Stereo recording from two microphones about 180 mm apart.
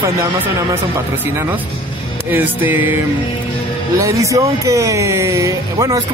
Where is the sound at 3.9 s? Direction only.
15° right (ahead or behind).